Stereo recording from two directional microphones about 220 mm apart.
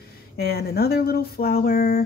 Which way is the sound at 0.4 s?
45° left (ahead or behind).